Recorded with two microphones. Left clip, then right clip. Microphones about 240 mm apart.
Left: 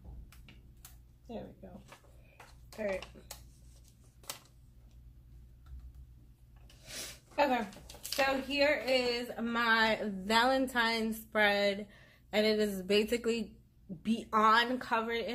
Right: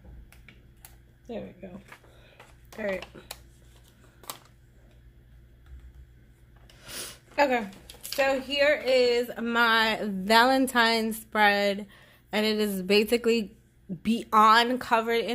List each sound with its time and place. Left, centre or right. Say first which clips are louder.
1.2 s speech: right 7 dB; right
2.7 s speech: right 5 dB; right
6.8 s a sound: right 5 dB; right
8.3 s speech: right 7 dB; right